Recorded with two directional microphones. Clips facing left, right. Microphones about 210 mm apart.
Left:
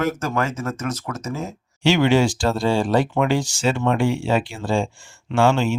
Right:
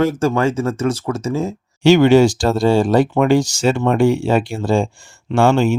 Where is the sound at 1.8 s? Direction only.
45° right (ahead or behind).